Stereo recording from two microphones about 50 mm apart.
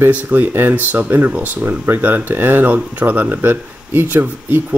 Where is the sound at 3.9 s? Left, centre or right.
Right.